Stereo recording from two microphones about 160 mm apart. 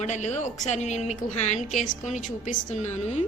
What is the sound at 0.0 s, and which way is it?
A woman's voice, 45° left (ahead or behind).